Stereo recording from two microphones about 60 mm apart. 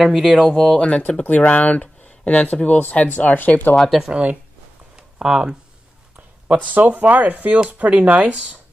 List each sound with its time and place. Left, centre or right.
0.0 s speech: centre
0.7 s speech: left
4.1 s speech: right
5.2 s speech: centre
6.6 s speech: right